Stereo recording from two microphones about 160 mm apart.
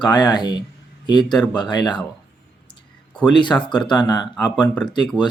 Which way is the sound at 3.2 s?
30° left (ahead or behind).